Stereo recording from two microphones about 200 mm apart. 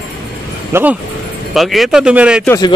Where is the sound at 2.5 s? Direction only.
20° left (ahead or behind).